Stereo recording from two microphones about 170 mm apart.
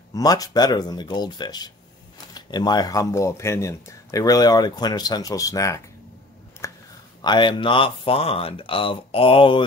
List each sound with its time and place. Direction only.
0.1 s speech: 20° left (ahead or behind)
6.6 s a sound: 15° left (ahead or behind)
7.2 s speech: 25° left (ahead or behind)